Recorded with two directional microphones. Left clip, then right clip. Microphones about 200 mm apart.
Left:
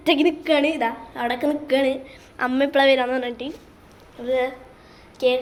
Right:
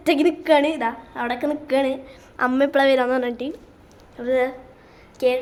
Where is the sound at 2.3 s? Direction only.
25° right (ahead or behind).